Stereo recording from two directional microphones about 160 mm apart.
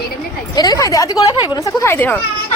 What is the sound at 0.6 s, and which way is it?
A woman's voice, 25° left (ahead or behind).